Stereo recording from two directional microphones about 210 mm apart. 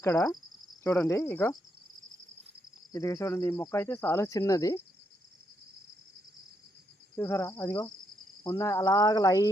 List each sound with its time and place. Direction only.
0.0 s speech: 15° left (ahead or behind)
2.9 s speech: 15° left (ahead or behind)
7.2 s speech: 10° left (ahead or behind)